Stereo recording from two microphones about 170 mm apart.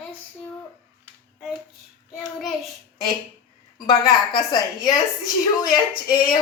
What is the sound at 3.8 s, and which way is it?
A woman's voice, 25° left (ahead or behind).